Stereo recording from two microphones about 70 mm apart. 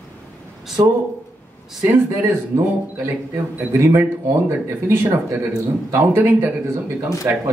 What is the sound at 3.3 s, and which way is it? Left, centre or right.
A man's voice, right.